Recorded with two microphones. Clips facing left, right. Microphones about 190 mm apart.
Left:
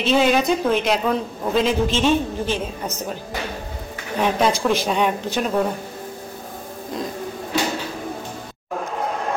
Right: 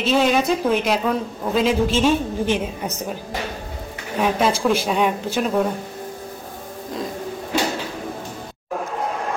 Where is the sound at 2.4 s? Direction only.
15° right (ahead or behind).